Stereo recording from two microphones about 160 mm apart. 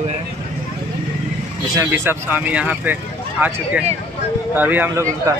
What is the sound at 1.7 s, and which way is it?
Speech, 20° right (ahead or behind).